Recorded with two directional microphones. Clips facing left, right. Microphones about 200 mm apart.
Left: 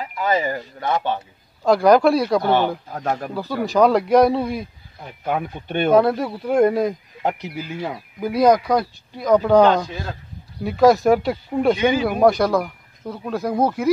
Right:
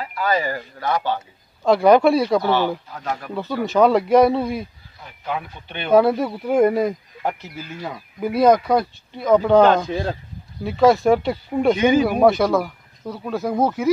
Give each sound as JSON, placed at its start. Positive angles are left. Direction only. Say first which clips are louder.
{"t": 0.0, "sound": "speech", "louder": "left 1 dB", "side_deg": 20}
{"t": 1.6, "sound": "speech", "louder": "even", "side_deg": 0}
{"t": 2.4, "sound": "speech", "louder": "left 1 dB", "side_deg": 50}
{"t": 3.7, "sound": "speech", "louder": "even", "side_deg": 0}
{"t": 5.2, "sound": "speech", "louder": "left 4 dB", "side_deg": 50}
{"t": 5.9, "sound": "speech", "louder": "right 1 dB", "side_deg": 0}
{"t": 7.2, "sound": "speech", "louder": "left 2 dB", "side_deg": 15}
{"t": 8.2, "sound": "speech", "louder": "even", "side_deg": -5}